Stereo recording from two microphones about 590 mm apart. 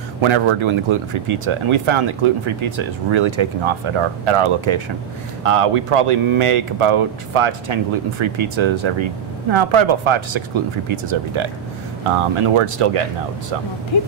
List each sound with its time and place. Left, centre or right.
0.2 s speech: right
13.9 s speech: left